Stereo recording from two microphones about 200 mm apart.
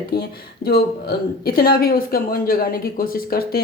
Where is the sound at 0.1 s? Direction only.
50° left (ahead or behind).